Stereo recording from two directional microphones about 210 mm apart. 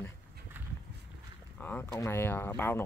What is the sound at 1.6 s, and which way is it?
Speech, 10° left (ahead or behind).